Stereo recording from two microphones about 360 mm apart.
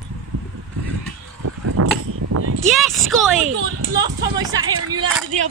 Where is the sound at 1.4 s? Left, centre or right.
Right.